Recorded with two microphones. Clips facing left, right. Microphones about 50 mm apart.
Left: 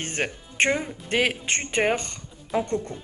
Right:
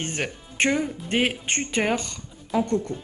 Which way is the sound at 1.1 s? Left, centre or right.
Left.